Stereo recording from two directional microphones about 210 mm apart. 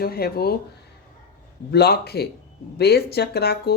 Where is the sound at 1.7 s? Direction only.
50° left (ahead or behind).